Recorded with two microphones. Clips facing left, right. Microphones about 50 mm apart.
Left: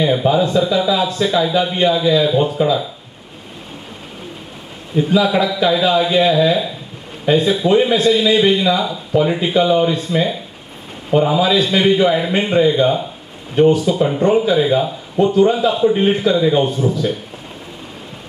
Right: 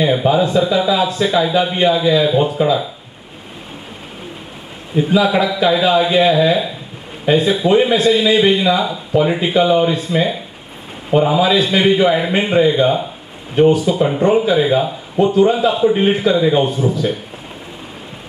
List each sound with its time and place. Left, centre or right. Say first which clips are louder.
0.0 s speech: right 1 dB; centre
4.9 s speech: right 1 dB; right
16.6 s speech: right 1 dB; centre